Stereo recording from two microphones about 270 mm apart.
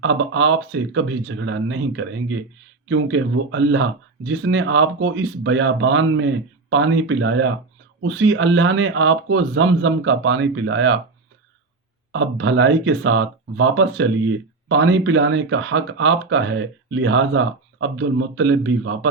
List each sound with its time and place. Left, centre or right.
0.0 s speech: right
12.1 s speech: right